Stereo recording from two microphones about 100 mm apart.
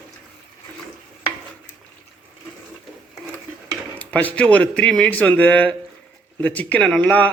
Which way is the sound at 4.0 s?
15° left (ahead or behind).